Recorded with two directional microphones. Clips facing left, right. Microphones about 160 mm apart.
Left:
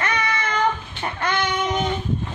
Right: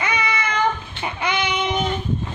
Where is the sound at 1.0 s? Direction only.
10° right (ahead or behind).